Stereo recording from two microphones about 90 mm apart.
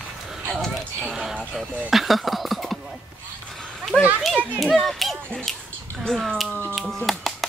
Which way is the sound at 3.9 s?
10° left (ahead or behind).